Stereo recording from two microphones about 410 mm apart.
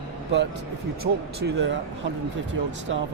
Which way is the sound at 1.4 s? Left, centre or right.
Right.